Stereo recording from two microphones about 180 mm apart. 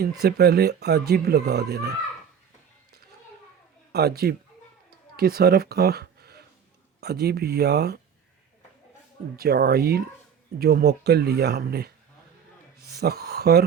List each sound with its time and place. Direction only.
0.0 s speech: 60° right (ahead or behind)
3.9 s speech: 60° right (ahead or behind)
9.3 s speech: 60° right (ahead or behind)